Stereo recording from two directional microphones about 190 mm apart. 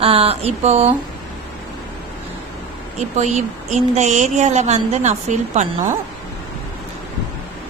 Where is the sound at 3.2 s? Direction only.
35° right (ahead or behind).